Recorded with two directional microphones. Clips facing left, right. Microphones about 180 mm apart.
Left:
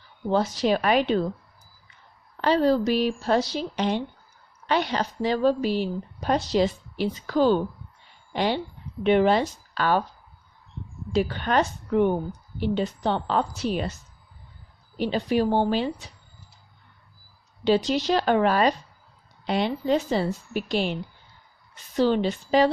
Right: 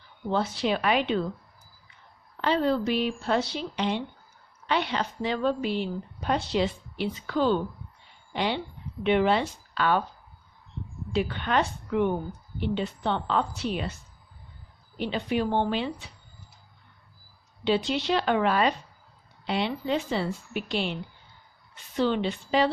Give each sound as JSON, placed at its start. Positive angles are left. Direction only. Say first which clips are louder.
{"t": 0.3, "sound": "a woman's voice", "louder": "left 4 dB", "side_deg": 40}
{"t": 2.4, "sound": "a woman's voice", "louder": "left 4 dB", "side_deg": 40}
{"t": 11.1, "sound": "a woman's voice", "louder": "left 3 dB", "side_deg": 40}
{"t": 14.9, "sound": "a woman's voice", "louder": "left 4 dB", "side_deg": 40}
{"t": 17.6, "sound": "a woman's voice", "louder": "left 4 dB", "side_deg": 40}
{"t": 21.9, "sound": "a woman's voice", "louder": "left 4 dB", "side_deg": 40}